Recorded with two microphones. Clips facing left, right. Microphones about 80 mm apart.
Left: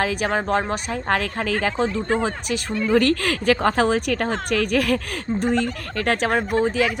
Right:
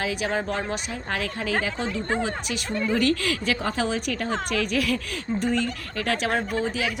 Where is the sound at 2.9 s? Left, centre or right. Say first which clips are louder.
Left 5 dB; left.